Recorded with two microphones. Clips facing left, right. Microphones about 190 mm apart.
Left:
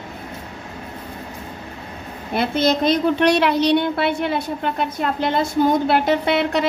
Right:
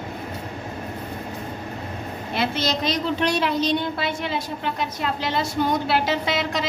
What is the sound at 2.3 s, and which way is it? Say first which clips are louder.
A woman's voice: left 6 dB; 55° left (ahead or behind).